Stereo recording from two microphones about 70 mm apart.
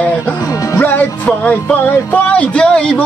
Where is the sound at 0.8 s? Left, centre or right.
Left.